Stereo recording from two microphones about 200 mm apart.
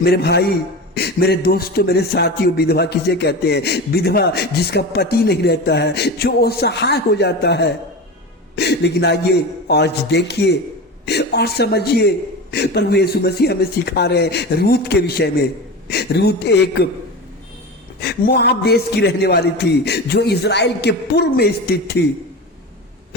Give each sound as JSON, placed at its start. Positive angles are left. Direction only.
{"t": 0.0, "sound": "a man's voice", "side_deg": 50}
{"t": 18.0, "sound": "a man's voice", "side_deg": 55}